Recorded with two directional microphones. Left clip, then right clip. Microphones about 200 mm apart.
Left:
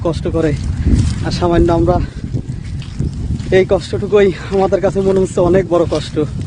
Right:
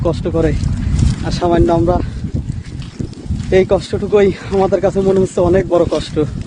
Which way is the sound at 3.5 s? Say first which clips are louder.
Even; 20° left (ahead or behind).